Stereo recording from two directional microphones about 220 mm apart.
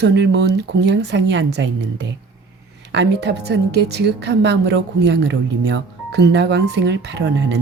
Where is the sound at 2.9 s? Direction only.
50° right (ahead or behind).